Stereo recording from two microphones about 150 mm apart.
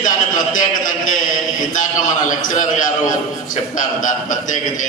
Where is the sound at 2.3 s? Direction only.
60° left (ahead or behind).